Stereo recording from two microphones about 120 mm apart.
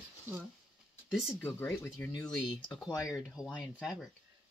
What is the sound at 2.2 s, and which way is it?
Speech, 5° left (ahead or behind).